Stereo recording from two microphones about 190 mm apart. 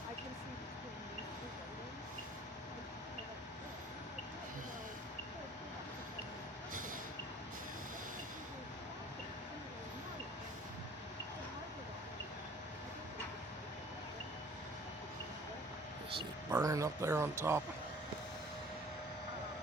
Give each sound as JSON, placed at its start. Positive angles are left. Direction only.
{"t": 16.5, "sound": "speech", "side_deg": -15}